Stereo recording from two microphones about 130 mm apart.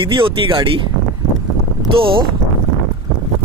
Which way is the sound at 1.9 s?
45° right (ahead or behind).